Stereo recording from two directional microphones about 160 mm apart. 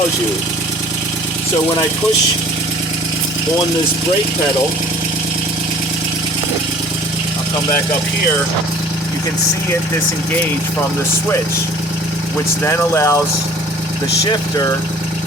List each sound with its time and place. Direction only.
12.6 s speech: 15° left (ahead or behind)